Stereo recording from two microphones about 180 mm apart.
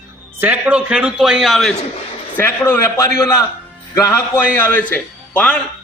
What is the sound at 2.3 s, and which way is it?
A man's voice, 10° left (ahead or behind).